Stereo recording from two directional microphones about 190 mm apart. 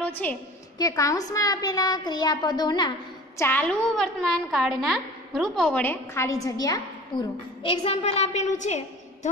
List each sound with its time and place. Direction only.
0.0 s a woman's voice: 10° left (ahead or behind)
3.3 s a woman's voice: 10° left (ahead or behind)
7.6 s a woman's voice: 30° left (ahead or behind)